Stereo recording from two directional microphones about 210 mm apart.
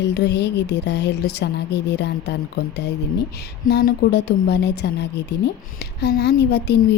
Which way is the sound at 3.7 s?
50° left (ahead or behind).